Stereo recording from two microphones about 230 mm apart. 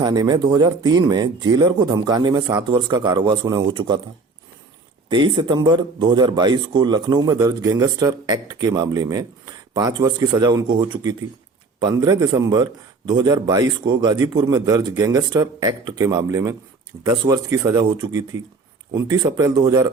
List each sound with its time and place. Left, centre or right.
0.0 s a man's voice: centre
5.0 s a man's voice: right